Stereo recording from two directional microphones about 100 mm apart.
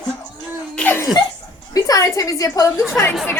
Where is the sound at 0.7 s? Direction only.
20° left (ahead or behind).